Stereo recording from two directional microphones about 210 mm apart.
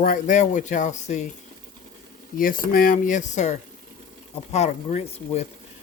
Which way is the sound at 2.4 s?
40° left (ahead or behind).